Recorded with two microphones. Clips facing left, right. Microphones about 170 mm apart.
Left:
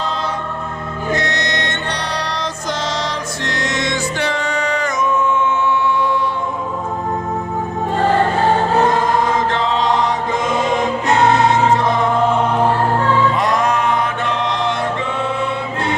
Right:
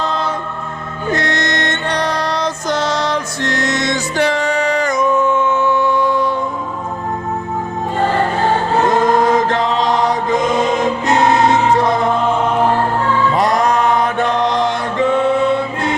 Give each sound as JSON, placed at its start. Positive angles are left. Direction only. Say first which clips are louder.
{"t": 1.3, "sound": "music", "louder": "right 3 dB", "side_deg": -50}
{"t": 5.5, "sound": "a sound", "louder": "right 2 dB", "side_deg": -40}
{"t": 13.3, "sound": "mantra", "louder": "right 3 dB", "side_deg": -35}